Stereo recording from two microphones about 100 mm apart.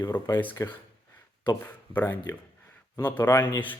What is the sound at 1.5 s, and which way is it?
Speech, 20° left (ahead or behind).